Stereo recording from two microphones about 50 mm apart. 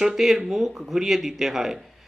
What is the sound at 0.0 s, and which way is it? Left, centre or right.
Speech, centre.